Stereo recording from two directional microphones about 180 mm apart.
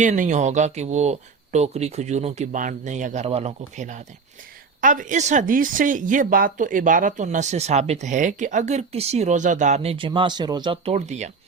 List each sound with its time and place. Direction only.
0.0 s speech: 45° right (ahead or behind); by 10.9 s 25° right (ahead or behind)
10.9 s speech: 40° right (ahead or behind)